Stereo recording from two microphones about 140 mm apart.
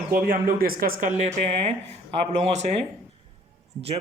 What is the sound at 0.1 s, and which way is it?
Speech, 90° right.